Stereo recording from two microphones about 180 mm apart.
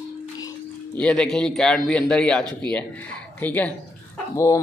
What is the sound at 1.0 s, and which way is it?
A man's voice, 5° left (ahead or behind).